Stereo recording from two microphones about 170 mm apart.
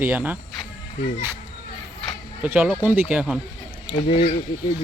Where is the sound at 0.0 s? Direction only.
10° right (ahead or behind).